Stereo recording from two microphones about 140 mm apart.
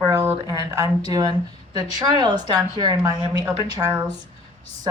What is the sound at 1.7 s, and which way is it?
A woman's voice, 30° right (ahead or behind).